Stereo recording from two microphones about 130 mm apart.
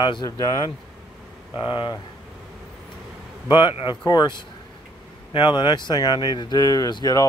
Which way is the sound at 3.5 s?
35° left (ahead or behind).